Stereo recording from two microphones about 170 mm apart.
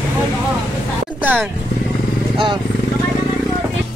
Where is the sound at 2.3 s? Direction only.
30° right (ahead or behind).